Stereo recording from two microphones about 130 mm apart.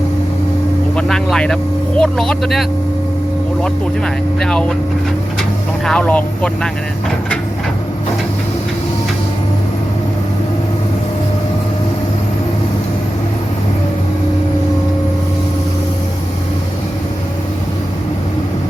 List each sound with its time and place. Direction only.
0.9 s vehicle: 5° left (ahead or behind)
2.0 s speech: 5° left (ahead or behind)
5.8 s speech: 10° left (ahead or behind)